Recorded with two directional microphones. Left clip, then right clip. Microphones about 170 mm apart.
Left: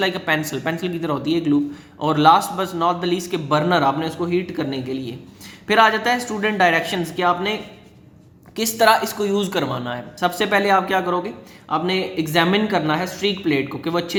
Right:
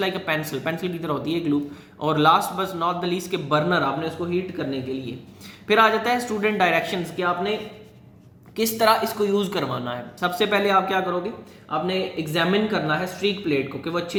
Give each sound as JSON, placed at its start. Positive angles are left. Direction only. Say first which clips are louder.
{"t": 0.0, "sound": "a man's voice", "louder": "left 4 dB", "side_deg": 30}
{"t": 5.6, "sound": "a man's voice", "louder": "left 3 dB", "side_deg": 25}
{"t": 8.5, "sound": "a man's voice", "louder": "left 3 dB", "side_deg": 30}